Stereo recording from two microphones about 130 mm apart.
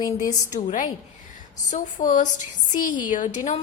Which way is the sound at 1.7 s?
75° left (ahead or behind).